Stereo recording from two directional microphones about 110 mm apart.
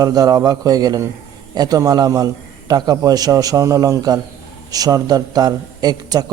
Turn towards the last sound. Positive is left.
turn(degrees=-40)  # may be behind; listen again after turning